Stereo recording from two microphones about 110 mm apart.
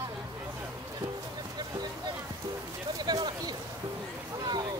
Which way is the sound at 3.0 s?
40° right (ahead or behind).